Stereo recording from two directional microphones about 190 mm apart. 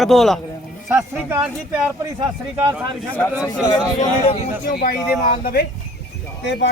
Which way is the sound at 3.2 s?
15° left (ahead or behind).